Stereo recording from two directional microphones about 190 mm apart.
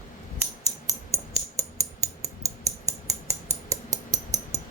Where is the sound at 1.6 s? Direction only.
15° right (ahead or behind).